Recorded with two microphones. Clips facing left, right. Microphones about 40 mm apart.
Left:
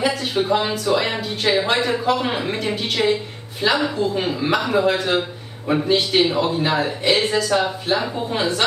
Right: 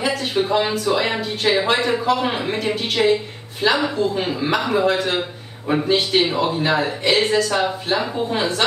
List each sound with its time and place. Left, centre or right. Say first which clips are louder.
0.0 s speech: even; centre